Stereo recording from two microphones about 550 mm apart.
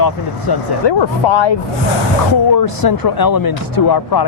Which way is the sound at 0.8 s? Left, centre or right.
Left.